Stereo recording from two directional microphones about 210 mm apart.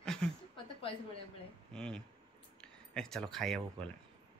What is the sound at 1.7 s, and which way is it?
Speech, 5° left (ahead or behind).